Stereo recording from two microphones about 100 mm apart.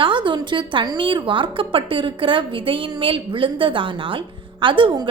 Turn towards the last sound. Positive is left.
turn(degrees=-55)  # may be behind; listen again after turning